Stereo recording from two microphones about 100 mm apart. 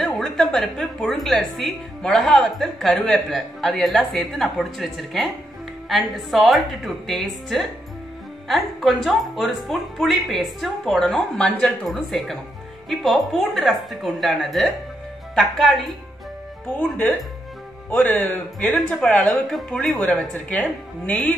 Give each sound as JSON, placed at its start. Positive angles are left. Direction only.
{"t": 0.0, "sound": "a woman's voice", "side_deg": 0}
{"t": 16.7, "sound": "speech", "side_deg": 15}
{"t": 18.6, "sound": "a woman's voice", "side_deg": 5}
{"t": 19.0, "sound": "speech", "side_deg": 15}
{"t": 19.5, "sound": "a woman's voice", "side_deg": 0}
{"t": 20.4, "sound": "speech", "side_deg": 15}